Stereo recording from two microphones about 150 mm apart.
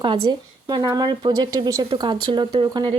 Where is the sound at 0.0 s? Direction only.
30° right (ahead or behind).